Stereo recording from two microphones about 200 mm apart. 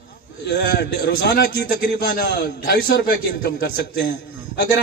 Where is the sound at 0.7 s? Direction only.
55° left (ahead or behind).